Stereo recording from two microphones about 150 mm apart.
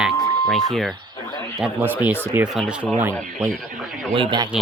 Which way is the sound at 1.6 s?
10° right (ahead or behind).